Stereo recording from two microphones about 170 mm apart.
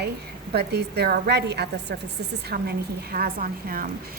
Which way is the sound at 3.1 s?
55° right (ahead or behind).